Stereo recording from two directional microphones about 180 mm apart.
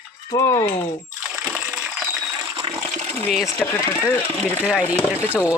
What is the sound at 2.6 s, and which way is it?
Water, 30° right (ahead or behind).